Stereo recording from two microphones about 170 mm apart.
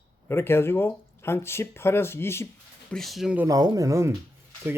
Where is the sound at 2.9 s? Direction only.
Centre (ahead or behind).